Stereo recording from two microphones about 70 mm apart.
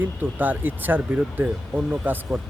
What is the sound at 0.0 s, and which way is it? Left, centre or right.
A man's voice, right.